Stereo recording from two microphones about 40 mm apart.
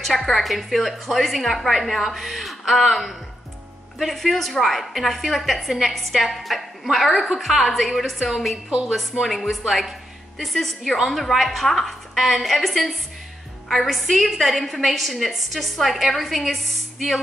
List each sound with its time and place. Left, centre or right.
0.3 s a woman's voice: centre
8.6 s a woman's voice: right
9.2 s a woman's voice: centre